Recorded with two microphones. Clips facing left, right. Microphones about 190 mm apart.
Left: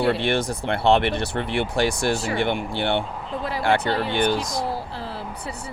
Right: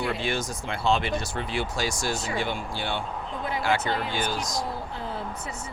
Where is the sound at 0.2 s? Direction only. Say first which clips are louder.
Left 6 dB; 60° left (ahead or behind).